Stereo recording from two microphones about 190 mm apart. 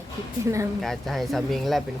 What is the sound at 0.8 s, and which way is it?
Speech, centre (ahead or behind).